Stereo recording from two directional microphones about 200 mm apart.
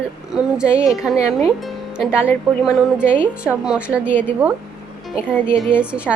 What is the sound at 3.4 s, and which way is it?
Speech, 5° right (ahead or behind).